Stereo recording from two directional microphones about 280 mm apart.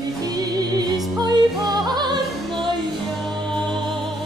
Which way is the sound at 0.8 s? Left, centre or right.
Centre.